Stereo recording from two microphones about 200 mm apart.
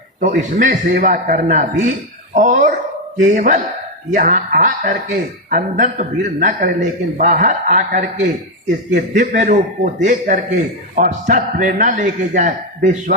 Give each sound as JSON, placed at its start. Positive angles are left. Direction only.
{"t": 0.2, "sound": "a woman's voice", "side_deg": -40}